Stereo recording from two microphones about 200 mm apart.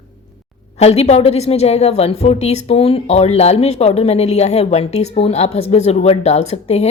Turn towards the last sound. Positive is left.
turn(degrees=30)  # may be behind; listen again after turning